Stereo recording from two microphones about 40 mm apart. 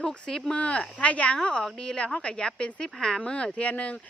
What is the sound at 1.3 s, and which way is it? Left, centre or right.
A woman's voice, left.